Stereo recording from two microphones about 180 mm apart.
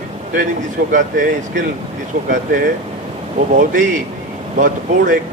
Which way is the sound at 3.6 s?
45° right (ahead or behind).